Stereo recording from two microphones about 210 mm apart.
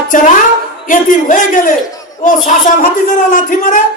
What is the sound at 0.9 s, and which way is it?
A man's voice, 40° left (ahead or behind).